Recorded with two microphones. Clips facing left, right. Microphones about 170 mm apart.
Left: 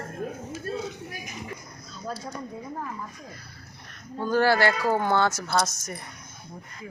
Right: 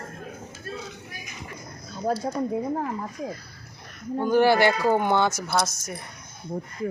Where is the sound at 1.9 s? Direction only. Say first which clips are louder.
Right 9 dB; 55° right (ahead or behind).